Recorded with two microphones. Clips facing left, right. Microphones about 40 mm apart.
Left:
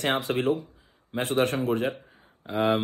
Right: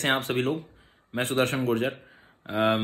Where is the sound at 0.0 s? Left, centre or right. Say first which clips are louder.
Even; right.